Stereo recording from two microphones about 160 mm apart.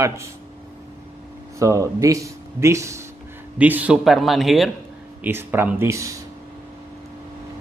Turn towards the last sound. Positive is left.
turn(degrees=-20)  # may be behind; listen again after turning